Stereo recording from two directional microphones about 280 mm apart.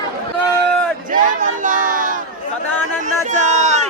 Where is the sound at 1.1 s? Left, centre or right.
Right.